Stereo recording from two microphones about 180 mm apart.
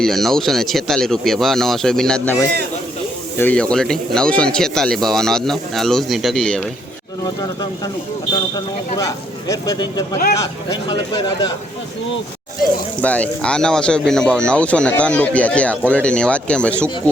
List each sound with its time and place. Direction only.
0.0 s speech: centre (ahead or behind)
8.3 s speech: 20° left (ahead or behind)
13.0 s speech: 10° left (ahead or behind)